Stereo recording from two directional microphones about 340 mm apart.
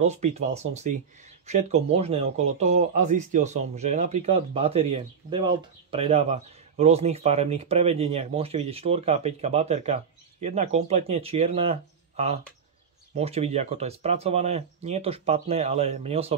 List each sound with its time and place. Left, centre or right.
0.0 s speech: centre